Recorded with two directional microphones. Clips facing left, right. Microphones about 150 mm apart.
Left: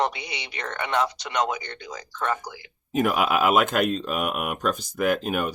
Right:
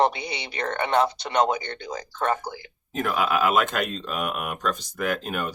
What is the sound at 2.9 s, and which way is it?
Speech, 10° left (ahead or behind).